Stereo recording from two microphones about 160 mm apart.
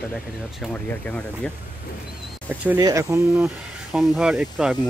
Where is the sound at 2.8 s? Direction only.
20° right (ahead or behind).